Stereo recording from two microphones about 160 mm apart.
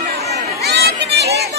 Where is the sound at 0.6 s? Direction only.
90° right.